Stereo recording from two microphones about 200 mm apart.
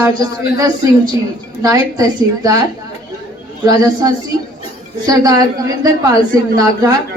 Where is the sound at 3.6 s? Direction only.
20° right (ahead or behind).